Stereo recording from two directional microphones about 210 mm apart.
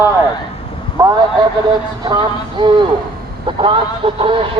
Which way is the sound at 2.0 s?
20° right (ahead or behind).